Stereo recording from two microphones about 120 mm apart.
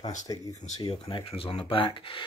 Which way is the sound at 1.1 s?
50° left (ahead or behind).